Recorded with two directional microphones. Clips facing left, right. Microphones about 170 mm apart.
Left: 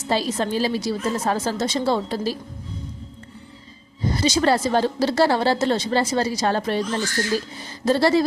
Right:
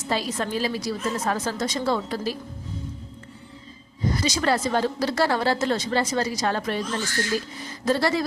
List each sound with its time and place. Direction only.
0.1 s a woman's voice: 30° left (ahead or behind)
4.1 s a woman's voice: 30° left (ahead or behind)